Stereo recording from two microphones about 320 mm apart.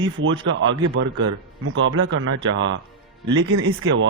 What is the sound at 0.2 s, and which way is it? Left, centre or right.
Speech, right.